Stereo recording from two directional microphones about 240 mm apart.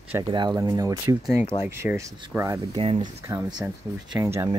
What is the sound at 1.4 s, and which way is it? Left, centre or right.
Speech, left.